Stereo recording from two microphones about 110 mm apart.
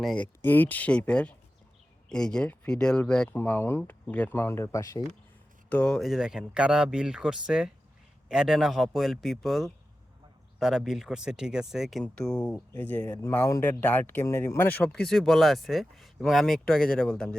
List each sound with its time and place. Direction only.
0.0 s speech: 5° left (ahead or behind)
0.4 s speech: 15° left (ahead or behind)
3.3 s speech: 20° left (ahead or behind)
5.6 s speech: 10° left (ahead or behind)
14.9 s speech: 5° left (ahead or behind)